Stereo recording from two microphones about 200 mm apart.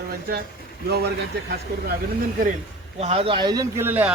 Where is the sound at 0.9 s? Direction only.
55° right (ahead or behind).